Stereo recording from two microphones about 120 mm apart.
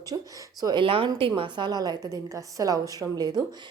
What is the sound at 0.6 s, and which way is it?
Speech, 40° right (ahead or behind).